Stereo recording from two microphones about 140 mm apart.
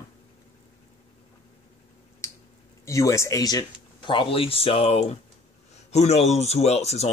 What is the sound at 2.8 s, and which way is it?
Speech, 20° left (ahead or behind).